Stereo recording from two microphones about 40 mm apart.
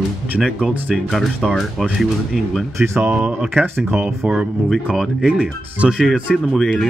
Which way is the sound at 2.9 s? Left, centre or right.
Right.